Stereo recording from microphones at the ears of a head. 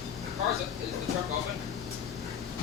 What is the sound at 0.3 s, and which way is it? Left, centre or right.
Speech, left.